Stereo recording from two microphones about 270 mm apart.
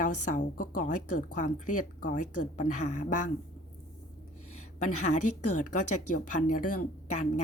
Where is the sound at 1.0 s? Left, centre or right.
Left.